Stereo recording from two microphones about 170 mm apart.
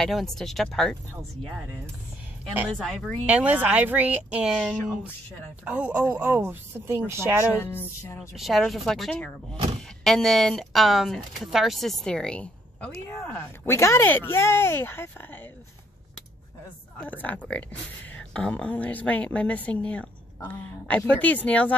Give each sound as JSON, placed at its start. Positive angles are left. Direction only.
{"t": 0.0, "sound": "speech", "side_deg": 0}
{"t": 2.8, "sound": "speech", "side_deg": 5}
{"t": 3.3, "sound": "speech", "side_deg": -10}
{"t": 7.5, "sound": "a woman's voice", "side_deg": 15}
{"t": 8.2, "sound": "a woman's voice", "side_deg": 0}
{"t": 17.0, "sound": "a woman's voice", "side_deg": 10}